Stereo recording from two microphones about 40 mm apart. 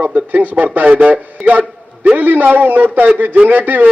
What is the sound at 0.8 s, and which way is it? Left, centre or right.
A man's voice, right.